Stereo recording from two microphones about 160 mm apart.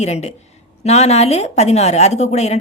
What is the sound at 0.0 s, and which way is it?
A woman's voice, 45° left (ahead or behind).